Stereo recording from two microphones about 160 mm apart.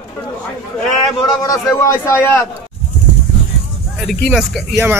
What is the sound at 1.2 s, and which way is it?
A man's voice, 20° left (ahead or behind).